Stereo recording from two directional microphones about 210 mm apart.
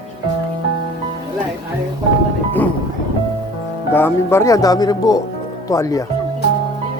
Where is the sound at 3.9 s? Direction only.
10° left (ahead or behind).